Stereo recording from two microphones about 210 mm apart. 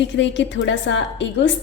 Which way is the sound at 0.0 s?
60° left (ahead or behind).